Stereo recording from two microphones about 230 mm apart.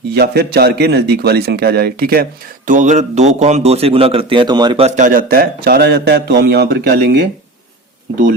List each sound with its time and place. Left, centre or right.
0.1 s a man's voice: right; by 4.9 s centre
4.9 s speech: right